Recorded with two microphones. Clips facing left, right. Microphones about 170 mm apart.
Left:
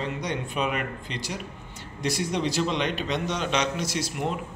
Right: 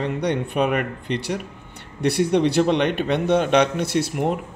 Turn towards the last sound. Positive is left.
turn(degrees=-55)  # may be behind; listen again after turning